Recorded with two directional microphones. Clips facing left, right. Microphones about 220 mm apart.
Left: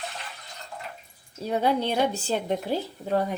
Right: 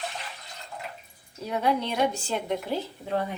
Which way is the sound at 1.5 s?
35° left (ahead or behind).